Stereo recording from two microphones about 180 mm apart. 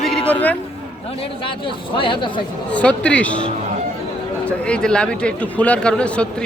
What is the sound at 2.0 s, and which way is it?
Speech, 30° left (ahead or behind).